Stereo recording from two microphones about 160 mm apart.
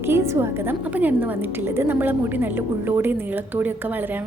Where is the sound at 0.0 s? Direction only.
15° right (ahead or behind).